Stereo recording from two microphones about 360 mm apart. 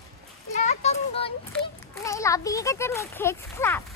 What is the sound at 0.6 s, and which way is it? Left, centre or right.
Children playing, centre.